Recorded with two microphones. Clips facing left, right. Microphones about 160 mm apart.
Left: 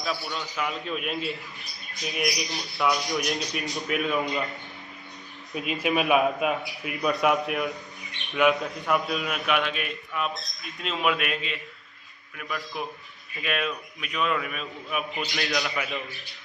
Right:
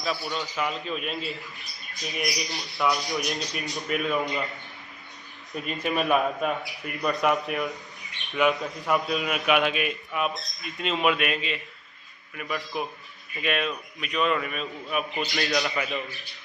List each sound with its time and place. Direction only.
0.0 s a man's voice: centre (ahead or behind)
5.5 s a man's voice: 5° left (ahead or behind)